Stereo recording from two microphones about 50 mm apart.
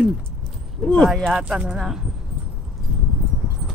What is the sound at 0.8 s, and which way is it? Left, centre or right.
Speech, centre.